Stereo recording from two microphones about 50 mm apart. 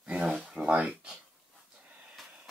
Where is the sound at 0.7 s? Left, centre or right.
Right.